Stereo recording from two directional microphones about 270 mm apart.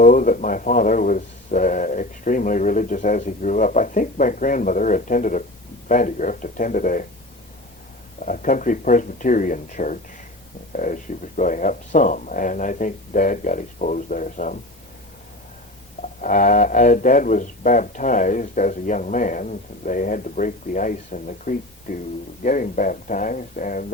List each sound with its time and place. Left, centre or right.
0.0 s speech: left
8.2 s speech: left
16.0 s speech: left